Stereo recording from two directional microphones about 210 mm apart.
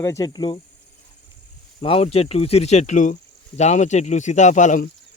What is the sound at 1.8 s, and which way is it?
Speech, 25° left (ahead or behind).